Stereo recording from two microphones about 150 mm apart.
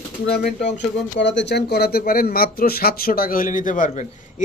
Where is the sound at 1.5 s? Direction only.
90° left; by 4.0 s 55° left (ahead or behind).